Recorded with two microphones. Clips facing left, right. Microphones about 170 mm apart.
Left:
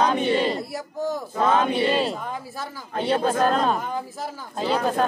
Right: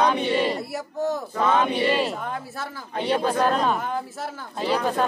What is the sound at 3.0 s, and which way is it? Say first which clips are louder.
Speech: left 1 dB; 40° left (ahead or behind).